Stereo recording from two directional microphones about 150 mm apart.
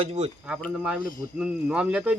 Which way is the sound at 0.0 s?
45° right (ahead or behind).